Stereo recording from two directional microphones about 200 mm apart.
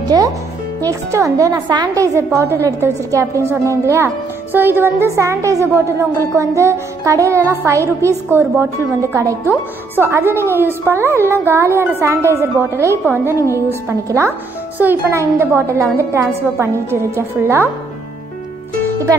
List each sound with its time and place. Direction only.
0.1 s a woman's voice: 20° right (ahead or behind)